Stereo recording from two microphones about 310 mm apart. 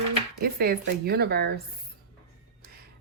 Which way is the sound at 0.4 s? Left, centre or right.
Right.